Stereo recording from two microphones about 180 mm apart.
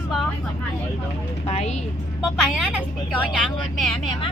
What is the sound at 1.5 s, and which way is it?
Speech, 40° left (ahead or behind).